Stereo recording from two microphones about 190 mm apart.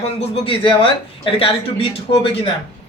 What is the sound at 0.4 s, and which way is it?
Speech, 25° left (ahead or behind).